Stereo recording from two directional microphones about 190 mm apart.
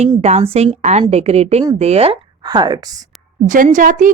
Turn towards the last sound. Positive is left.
turn(degrees=-45)  # may be behind; listen again after turning